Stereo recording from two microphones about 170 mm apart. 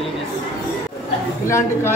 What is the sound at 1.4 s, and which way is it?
Speech, 15° left (ahead or behind).